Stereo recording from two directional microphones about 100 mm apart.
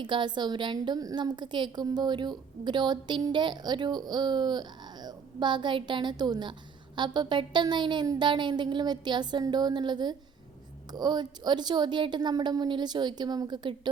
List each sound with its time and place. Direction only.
0.0 s a woman's voice: 50° right (ahead or behind)